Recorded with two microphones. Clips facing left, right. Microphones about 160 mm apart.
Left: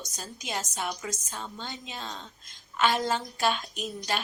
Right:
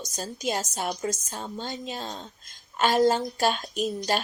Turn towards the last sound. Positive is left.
turn(degrees=-40)  # may be behind; listen again after turning